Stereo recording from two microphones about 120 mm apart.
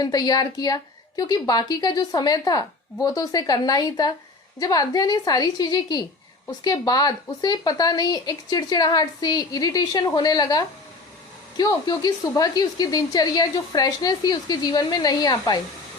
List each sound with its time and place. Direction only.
0.0 s a woman's voice: 30° left (ahead or behind)